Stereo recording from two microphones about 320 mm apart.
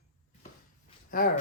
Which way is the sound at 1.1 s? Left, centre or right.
Left.